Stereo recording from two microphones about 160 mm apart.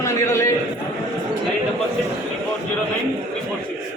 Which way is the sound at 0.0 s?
20° left (ahead or behind).